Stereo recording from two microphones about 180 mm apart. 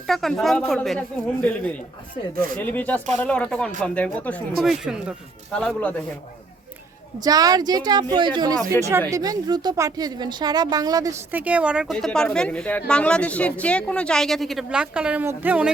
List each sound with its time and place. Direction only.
0.1 s speech: centre (ahead or behind)
2.3 s speech: 50° right (ahead or behind)
2.6 s speech: 10° left (ahead or behind)
7.2 s a woman's voice: 20° right (ahead or behind)